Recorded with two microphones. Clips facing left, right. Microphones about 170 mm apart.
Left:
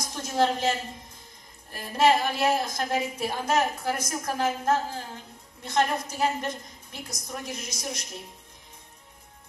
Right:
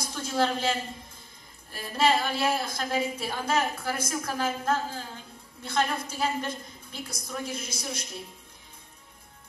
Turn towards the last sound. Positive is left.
turn(degrees=20)  # may be behind; listen again after turning